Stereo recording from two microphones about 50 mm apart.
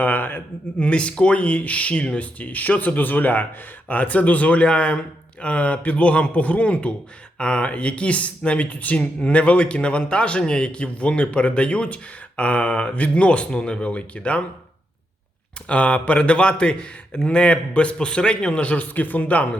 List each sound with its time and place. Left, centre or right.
0.0 s a man's voice: left
0.8 s speech: left
15.7 s speech: left